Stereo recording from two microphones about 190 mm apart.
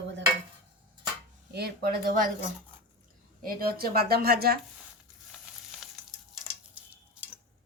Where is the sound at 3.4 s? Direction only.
50° right (ahead or behind).